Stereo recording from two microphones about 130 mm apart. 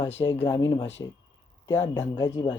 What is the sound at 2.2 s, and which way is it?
Speech, 30° left (ahead or behind).